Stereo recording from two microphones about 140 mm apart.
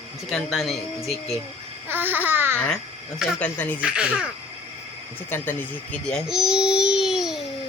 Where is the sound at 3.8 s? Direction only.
5° right (ahead or behind).